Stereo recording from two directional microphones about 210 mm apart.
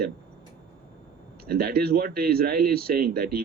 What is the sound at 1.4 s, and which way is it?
A man's voice, 45° right (ahead or behind).